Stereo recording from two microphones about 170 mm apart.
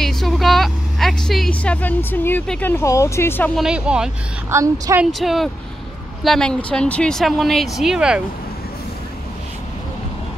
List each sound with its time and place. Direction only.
0.0 s a woman's voice: centre (ahead or behind)
3.5 s speech: 5° right (ahead or behind)
4.5 s a woman's voice: 15° right (ahead or behind)
5.2 s speech: centre (ahead or behind)